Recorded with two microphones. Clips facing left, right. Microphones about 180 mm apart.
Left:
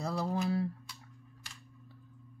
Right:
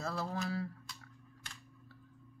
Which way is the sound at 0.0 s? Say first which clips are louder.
Left 5 dB; 15° left (ahead or behind).